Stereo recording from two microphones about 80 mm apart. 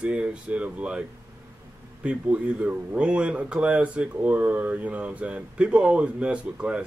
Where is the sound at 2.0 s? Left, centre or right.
Centre.